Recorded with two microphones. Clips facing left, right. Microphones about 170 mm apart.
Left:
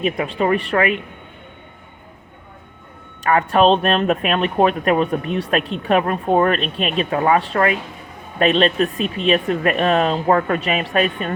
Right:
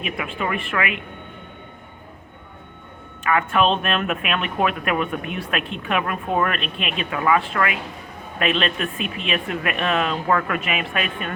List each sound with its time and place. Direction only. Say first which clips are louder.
0.0 s speech: left 7 dB; 35° left (ahead or behind)
3.2 s speech: left 5 dB; 35° left (ahead or behind)